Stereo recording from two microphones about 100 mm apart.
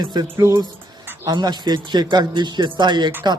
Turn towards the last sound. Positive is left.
turn(degrees=-50)  # may be behind; listen again after turning